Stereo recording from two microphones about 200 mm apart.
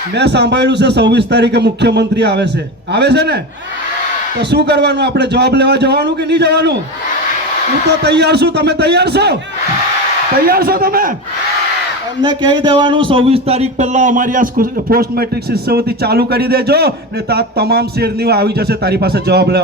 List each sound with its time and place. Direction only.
0.2 s a man's voice: 60° right (ahead or behind)
4.5 s a man's voice: 55° right (ahead or behind)
7.9 s a man's voice: 55° right (ahead or behind)
10.4 s a man's voice: 50° right (ahead or behind)
12.2 s a man's voice: 20° right (ahead or behind); by 19.6 s 55° right (ahead or behind)